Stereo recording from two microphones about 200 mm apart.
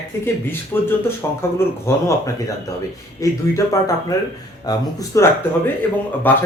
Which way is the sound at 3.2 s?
15° left (ahead or behind).